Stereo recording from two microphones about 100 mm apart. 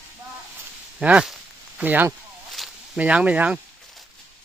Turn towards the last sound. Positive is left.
turn(degrees=-15)  # may be behind; listen again after turning